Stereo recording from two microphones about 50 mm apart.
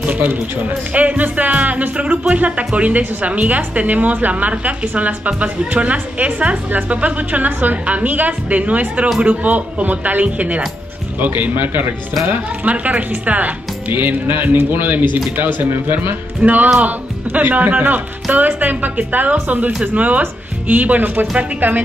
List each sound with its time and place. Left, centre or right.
0.0 s a sound: right
0.9 s a woman's voice: right
11.1 s speech: right
12.3 s speech: right